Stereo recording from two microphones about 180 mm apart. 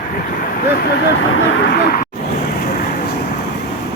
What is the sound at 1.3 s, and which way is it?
Speech, 60° left (ahead or behind).